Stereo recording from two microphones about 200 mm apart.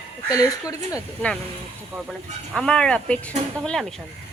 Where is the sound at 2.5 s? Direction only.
5° left (ahead or behind).